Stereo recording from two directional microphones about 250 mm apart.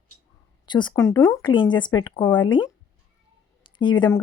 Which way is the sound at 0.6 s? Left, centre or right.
Centre.